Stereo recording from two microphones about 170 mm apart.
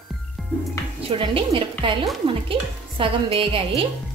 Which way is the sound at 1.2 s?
30° right (ahead or behind).